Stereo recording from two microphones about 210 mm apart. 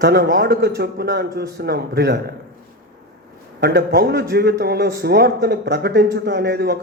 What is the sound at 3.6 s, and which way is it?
Speech, 50° right (ahead or behind).